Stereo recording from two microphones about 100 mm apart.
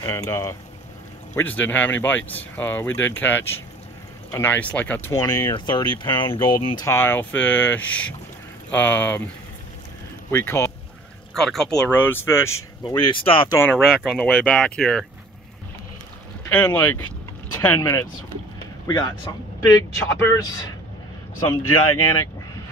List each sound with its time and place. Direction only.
0.0 s speech: 30° left (ahead or behind)
1.3 s speech: 15° left (ahead or behind)
5.1 s speech: 35° left (ahead or behind)
6.9 s speech: 20° left (ahead or behind)
10.3 s speech: 25° left (ahead or behind)
11.3 s speech: 5° left (ahead or behind)
11.9 s speech: 20° left (ahead or behind)
12.8 s speech: 45° left (ahead or behind)
13.7 s speech: centre (ahead or behind)
16.4 s speech: 20° left (ahead or behind)
18.9 s speech: 40° left (ahead or behind)
19.7 s speech: 30° left (ahead or behind)
21.4 s speech: 30° left (ahead or behind)